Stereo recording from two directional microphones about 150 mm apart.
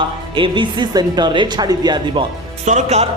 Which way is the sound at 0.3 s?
35° right (ahead or behind).